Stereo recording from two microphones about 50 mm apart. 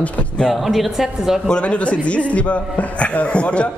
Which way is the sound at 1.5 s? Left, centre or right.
Left.